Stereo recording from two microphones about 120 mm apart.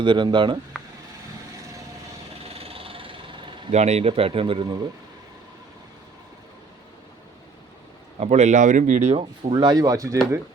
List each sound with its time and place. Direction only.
0.0 s speech: 40° right (ahead or behind)
2.4 s vehicle: 55° right (ahead or behind)
3.7 s speech: 65° right (ahead or behind); by 4.7 s 50° right (ahead or behind)
8.2 s speech: 75° right (ahead or behind)
9.1 s speech: 40° right (ahead or behind)